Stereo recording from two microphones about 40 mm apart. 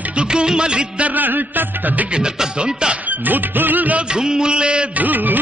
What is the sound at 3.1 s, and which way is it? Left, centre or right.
Music, right.